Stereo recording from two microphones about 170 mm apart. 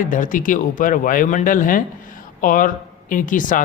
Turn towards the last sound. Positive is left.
turn(degrees=50)  # may be behind; listen again after turning